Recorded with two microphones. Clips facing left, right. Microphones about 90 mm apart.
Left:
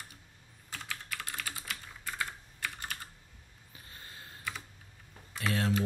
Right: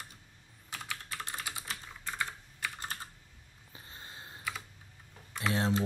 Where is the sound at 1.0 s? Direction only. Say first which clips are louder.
Even; 25° right (ahead or behind).